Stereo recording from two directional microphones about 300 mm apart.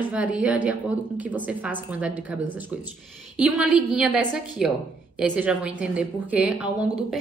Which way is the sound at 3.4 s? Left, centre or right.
Centre.